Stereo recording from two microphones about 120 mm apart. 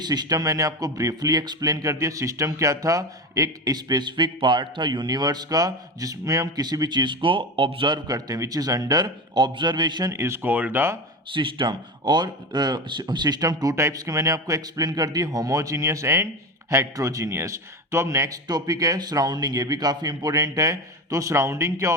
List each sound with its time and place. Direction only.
0.0 s a man's voice: 35° right (ahead or behind)
8.0 s a man's voice: 30° right (ahead or behind)
11.3 s speech: 40° right (ahead or behind); by 21.9 s 25° right (ahead or behind)